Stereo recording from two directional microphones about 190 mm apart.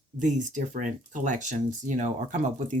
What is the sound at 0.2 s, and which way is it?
Speech, 40° right (ahead or behind).